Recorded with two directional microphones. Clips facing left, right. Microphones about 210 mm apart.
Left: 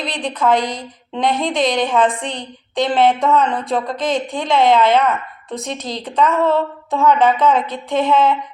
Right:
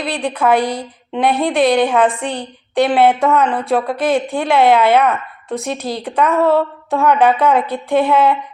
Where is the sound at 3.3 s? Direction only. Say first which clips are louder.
Right 2 dB; 10° right (ahead or behind).